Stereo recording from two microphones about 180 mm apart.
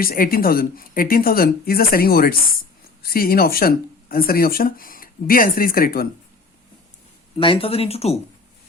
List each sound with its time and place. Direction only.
0.0 s speech: 55° left (ahead or behind)
7.3 s speech: 30° left (ahead or behind)